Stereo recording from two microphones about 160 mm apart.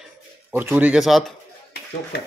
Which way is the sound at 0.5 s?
15° right (ahead or behind).